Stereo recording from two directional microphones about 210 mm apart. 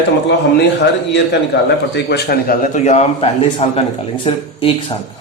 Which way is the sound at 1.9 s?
50° left (ahead or behind).